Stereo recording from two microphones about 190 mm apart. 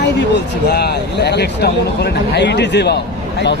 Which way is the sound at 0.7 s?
60° left (ahead or behind).